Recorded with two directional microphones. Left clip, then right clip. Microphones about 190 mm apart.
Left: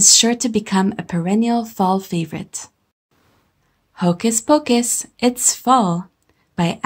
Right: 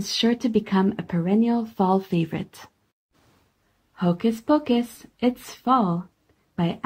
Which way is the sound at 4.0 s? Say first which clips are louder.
Left 5 dB; 20° left (ahead or behind).